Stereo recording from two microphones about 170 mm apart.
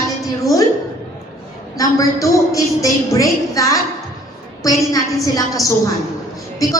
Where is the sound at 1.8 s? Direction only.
20° left (ahead or behind).